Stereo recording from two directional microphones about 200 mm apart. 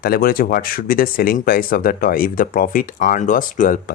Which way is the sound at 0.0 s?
50° left (ahead or behind).